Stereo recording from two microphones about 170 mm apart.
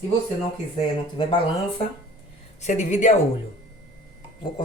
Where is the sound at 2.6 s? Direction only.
45° left (ahead or behind).